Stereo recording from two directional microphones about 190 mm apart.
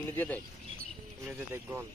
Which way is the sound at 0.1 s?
10° left (ahead or behind).